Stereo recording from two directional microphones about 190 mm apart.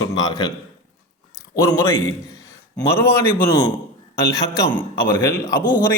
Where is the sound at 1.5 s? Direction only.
15° left (ahead or behind).